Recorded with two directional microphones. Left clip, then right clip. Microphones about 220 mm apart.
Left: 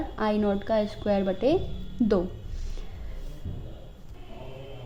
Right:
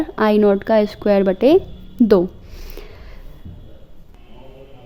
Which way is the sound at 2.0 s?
55° right (ahead or behind).